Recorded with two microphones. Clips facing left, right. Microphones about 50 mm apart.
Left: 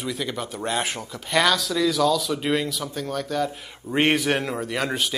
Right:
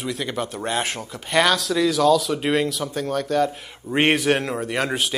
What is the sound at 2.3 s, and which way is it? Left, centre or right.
Speech, centre.